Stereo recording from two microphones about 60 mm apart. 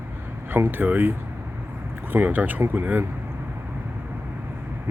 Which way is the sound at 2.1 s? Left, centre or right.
Right.